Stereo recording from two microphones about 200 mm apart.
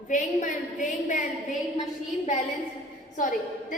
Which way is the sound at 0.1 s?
40° left (ahead or behind).